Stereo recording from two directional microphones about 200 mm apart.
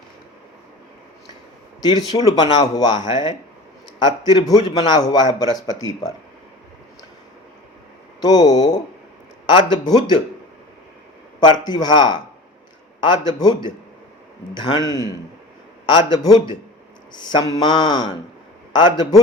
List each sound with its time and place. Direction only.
2.2 s speech: 20° left (ahead or behind)
8.2 s speech: 20° left (ahead or behind)
11.3 s speech: 20° left (ahead or behind)
14.8 s a man's voice: 20° right (ahead or behind)
15.9 s speech: 20° left (ahead or behind)